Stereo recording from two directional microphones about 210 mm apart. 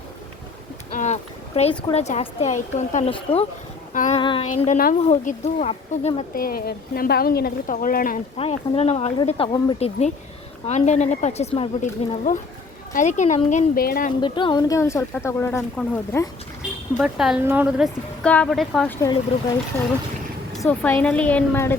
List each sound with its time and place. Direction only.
0.9 s a woman's voice: 35° left (ahead or behind)
4.2 s speech: 25° left (ahead or behind)
4.6 s a woman's voice: 40° left (ahead or behind)
6.3 s a woman's voice: 45° left (ahead or behind)
8.4 s a woman's voice: 30° left (ahead or behind); by 14.1 s 45° left (ahead or behind)
14.2 s speech: 20° left (ahead or behind)
17.0 s a woman's voice: 5° right (ahead or behind)
20.6 s speech: 10° left (ahead or behind)